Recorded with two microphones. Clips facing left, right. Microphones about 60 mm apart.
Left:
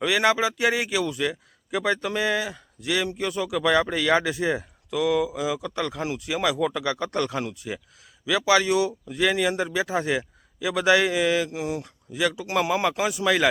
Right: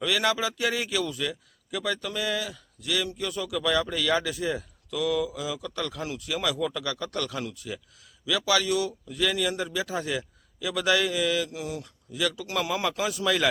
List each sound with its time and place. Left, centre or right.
0.0 s a man's voice: left